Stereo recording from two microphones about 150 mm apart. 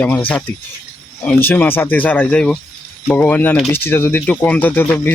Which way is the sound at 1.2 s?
10° left (ahead or behind).